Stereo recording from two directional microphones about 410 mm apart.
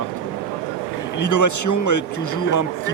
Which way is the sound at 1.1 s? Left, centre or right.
Left.